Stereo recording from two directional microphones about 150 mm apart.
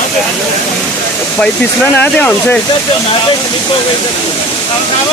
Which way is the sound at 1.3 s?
10° left (ahead or behind).